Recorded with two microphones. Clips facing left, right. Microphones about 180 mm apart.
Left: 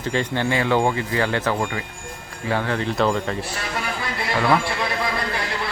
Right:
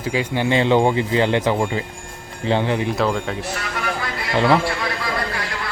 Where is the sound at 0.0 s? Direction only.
10° right (ahead or behind).